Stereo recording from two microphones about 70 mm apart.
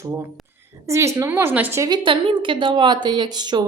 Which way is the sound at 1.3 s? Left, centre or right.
Right.